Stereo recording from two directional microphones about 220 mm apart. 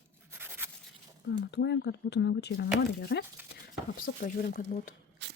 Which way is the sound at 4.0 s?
40° left (ahead or behind).